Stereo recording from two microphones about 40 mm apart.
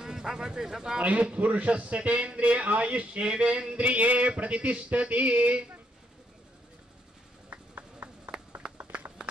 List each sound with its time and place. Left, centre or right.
0.0 s speech: centre
1.0 s a man's voice: right
7.4 s a sound: right